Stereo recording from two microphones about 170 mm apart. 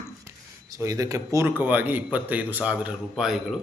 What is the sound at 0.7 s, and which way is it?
A man's voice, 20° right (ahead or behind).